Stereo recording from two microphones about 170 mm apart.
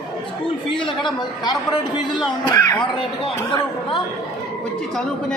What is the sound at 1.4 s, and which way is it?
A woman's voice, 25° left (ahead or behind).